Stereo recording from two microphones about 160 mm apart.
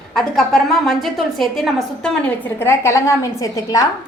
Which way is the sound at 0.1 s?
Centre (ahead or behind).